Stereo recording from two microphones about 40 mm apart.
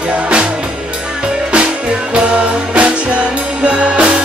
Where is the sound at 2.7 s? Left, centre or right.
Right.